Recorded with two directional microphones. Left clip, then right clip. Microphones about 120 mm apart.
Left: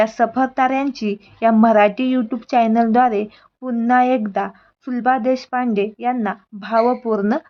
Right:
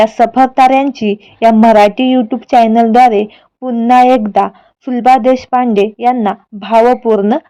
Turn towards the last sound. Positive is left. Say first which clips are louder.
# right 9 dB
turn(degrees=-35)  # may be behind; listen again after turning